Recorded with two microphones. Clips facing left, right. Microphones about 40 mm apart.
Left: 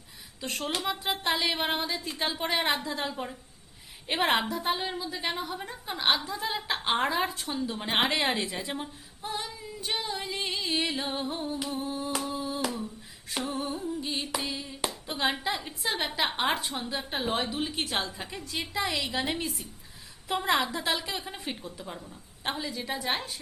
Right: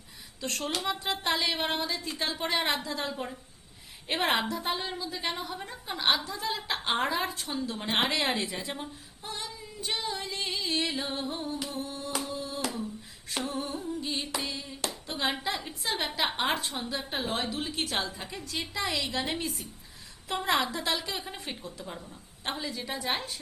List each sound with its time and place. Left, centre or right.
0.4 s a woman's voice: centre
11.6 s humming: centre
13.3 s a sound: centre
15.1 s a woman's voice: centre